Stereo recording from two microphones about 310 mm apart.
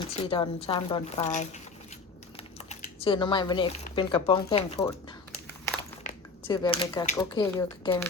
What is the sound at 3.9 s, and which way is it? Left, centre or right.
A woman's voice, centre.